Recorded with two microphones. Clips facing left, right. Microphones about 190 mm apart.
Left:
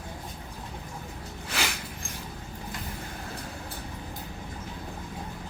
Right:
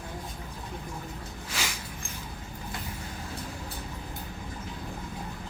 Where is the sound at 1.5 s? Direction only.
60° left (ahead or behind).